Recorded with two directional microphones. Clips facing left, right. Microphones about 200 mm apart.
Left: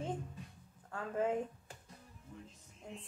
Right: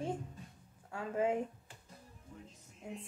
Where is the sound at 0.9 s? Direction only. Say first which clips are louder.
Right 2 dB; 10° right (ahead or behind).